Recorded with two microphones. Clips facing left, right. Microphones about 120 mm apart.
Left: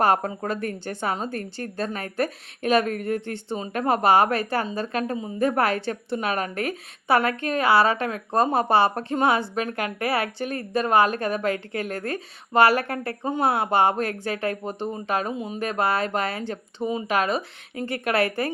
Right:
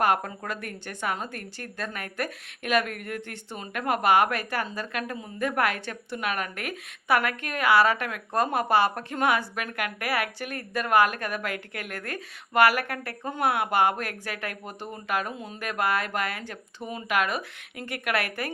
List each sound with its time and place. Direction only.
0.0 s a woman's voice: 30° left (ahead or behind)